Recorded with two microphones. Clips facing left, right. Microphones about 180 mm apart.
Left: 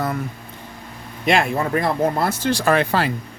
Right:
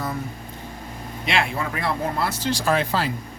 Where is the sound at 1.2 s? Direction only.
45° left (ahead or behind).